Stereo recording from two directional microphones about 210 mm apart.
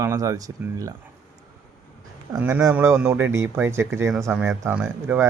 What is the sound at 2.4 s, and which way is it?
Speech, 10° right (ahead or behind).